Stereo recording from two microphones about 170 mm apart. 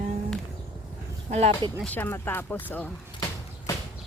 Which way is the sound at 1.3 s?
40° right (ahead or behind).